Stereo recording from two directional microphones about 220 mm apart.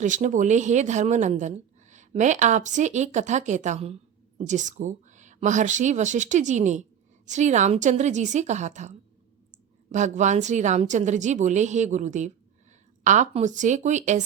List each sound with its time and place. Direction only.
0.0 s a woman's voice: 35° right (ahead or behind)